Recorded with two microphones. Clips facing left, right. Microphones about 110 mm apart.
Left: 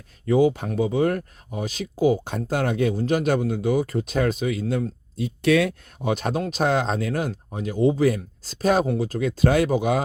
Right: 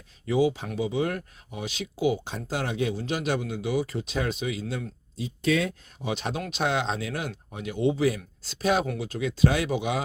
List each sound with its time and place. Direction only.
0.3 s speech: 50° left (ahead or behind)
5.1 s speech: 60° left (ahead or behind); by 10.0 s 45° left (ahead or behind)